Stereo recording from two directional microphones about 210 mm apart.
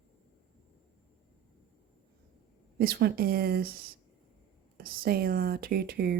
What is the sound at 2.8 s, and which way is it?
Speech, 45° right (ahead or behind).